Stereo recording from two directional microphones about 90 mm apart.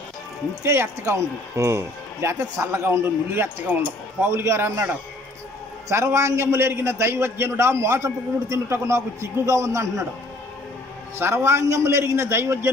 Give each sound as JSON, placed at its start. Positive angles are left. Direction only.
{"t": 0.7, "sound": "a man's voice", "side_deg": -30}
{"t": 11.1, "sound": "a man's voice", "side_deg": -25}